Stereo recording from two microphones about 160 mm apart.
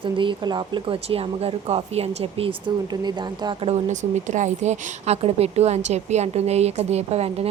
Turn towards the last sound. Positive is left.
turn(degrees=-40)  # may be behind; listen again after turning